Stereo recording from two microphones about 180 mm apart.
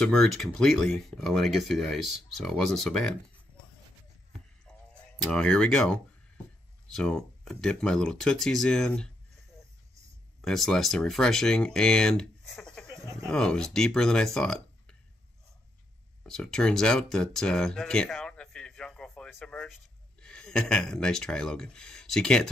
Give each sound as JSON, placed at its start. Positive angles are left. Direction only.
{"t": 0.0, "sound": "speech", "side_deg": 5}
{"t": 4.6, "sound": "a sound", "side_deg": 5}
{"t": 6.9, "sound": "speech", "side_deg": 5}
{"t": 10.4, "sound": "speech", "side_deg": 0}
{"t": 12.8, "sound": "a sound", "side_deg": -15}
{"t": 13.2, "sound": "speech", "side_deg": 5}
{"t": 16.3, "sound": "speech", "side_deg": 5}